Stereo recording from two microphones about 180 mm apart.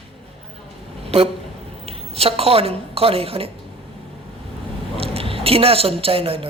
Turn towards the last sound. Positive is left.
turn(degrees=-30)  # may be behind; listen again after turning